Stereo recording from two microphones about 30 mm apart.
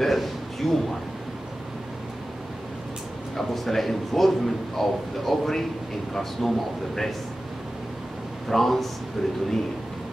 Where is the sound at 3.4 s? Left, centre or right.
Centre.